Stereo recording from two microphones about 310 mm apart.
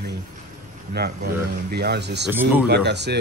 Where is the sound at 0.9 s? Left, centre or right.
Right.